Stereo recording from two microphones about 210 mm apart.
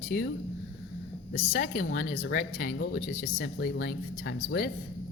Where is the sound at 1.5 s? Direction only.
40° left (ahead or behind).